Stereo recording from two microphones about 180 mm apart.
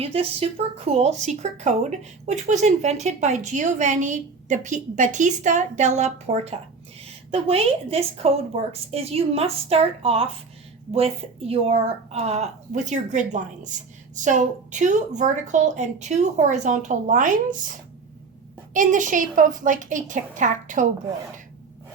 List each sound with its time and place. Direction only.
0.0 s a woman's voice: 35° right (ahead or behind)
18.7 s a woman's voice: 45° right (ahead or behind)